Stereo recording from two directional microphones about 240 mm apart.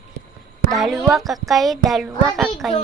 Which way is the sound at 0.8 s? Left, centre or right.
Centre.